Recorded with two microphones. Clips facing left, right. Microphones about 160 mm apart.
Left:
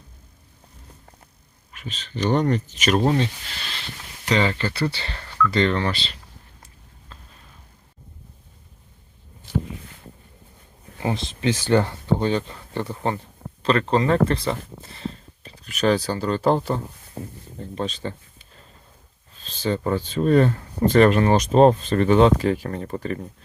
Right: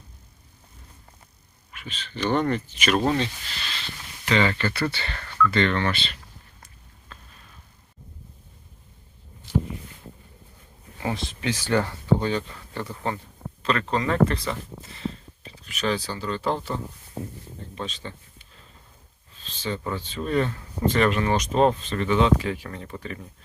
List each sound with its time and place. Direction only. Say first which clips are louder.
1.7 s speech: left 3 dB; 40° left (ahead or behind)
4.3 s speech: left 1 dB; 30° left (ahead or behind)
11.0 s speech: left 4 dB; 25° left (ahead or behind)
15.6 s speech: left 6 dB; 40° left (ahead or behind)
17.7 s speech: left 7 dB; 40° left (ahead or behind)
19.5 s speech: left 7 dB; 40° left (ahead or behind)